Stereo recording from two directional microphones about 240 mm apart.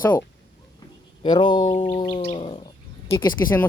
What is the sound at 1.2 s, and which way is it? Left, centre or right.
Speech, centre.